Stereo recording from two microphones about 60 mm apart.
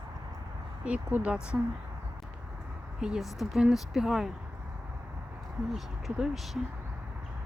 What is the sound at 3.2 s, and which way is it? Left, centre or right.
Speech, centre.